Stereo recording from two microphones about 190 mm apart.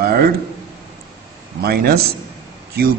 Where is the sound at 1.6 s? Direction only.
55° right (ahead or behind).